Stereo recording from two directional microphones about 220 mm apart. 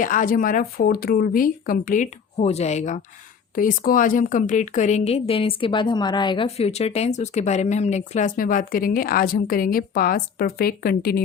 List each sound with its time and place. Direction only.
0.0 s a woman's voice: 35° left (ahead or behind)